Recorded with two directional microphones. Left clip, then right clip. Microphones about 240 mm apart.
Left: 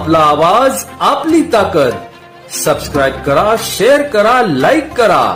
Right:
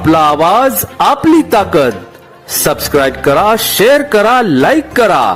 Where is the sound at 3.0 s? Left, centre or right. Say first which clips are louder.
Right 2 dB; right.